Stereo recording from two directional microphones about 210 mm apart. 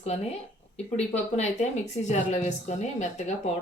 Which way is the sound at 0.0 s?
30° left (ahead or behind).